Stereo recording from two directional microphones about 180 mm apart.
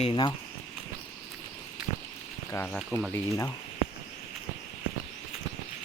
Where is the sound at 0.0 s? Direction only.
30° left (ahead or behind).